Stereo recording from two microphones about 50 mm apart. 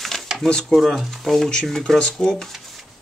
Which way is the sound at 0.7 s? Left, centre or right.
Centre.